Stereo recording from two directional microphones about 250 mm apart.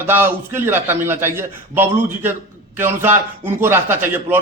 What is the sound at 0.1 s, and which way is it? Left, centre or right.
A man's voice, centre.